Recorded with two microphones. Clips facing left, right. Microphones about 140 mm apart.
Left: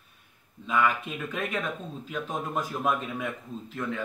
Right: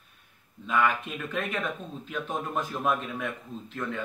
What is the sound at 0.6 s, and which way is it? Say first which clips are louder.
Speech: even; 5° left (ahead or behind).